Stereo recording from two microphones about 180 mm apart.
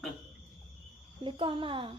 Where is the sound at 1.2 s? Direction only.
30° right (ahead or behind).